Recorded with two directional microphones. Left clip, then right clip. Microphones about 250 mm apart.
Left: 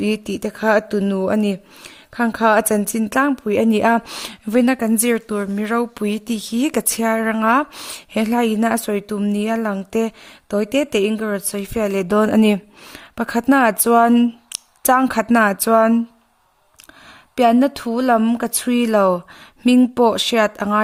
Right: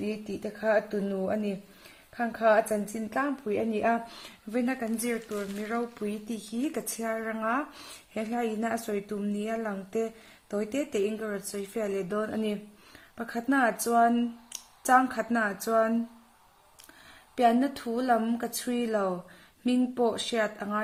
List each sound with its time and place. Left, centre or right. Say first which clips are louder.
0.0 s a woman's voice: left 12 dB; left
17.3 s a woman's voice: left 10 dB; left